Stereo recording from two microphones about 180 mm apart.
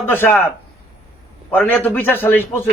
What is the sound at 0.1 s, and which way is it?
Speech, 10° left (ahead or behind).